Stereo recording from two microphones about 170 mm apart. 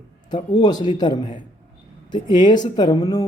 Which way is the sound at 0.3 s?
25° left (ahead or behind).